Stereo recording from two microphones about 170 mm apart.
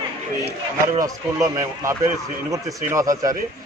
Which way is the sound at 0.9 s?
20° right (ahead or behind).